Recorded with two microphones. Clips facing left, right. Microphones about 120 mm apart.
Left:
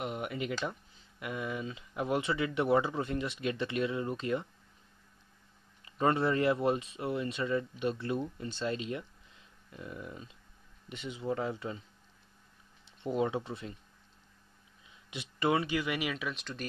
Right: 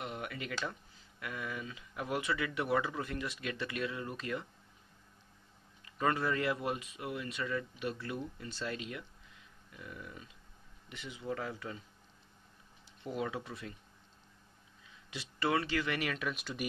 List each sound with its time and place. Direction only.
0.0 s a sound: 20° left (ahead or behind)
1.2 s speech: 25° left (ahead or behind)
5.9 s speech: 30° left (ahead or behind)
12.8 s speech: 25° left (ahead or behind)
15.0 s speech: 20° left (ahead or behind); by 16.6 s 5° right (ahead or behind)